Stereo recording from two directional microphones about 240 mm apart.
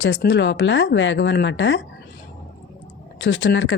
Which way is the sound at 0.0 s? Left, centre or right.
Left.